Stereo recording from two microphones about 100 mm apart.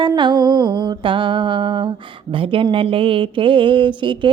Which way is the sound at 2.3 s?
60° right (ahead or behind).